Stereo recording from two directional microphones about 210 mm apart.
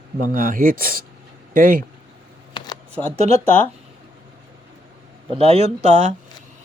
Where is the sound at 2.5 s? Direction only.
20° left (ahead or behind).